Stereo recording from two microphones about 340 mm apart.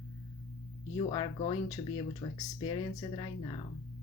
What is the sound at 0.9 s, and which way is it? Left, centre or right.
Speech, centre.